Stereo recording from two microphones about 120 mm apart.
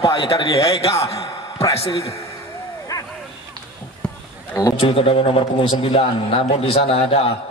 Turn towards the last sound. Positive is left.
turn(degrees=55)  # may be behind; listen again after turning